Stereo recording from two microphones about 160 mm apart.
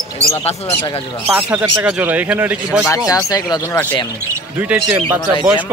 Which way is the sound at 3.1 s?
25° left (ahead or behind).